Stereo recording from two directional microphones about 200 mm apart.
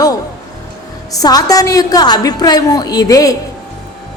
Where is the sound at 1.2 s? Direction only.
20° left (ahead or behind).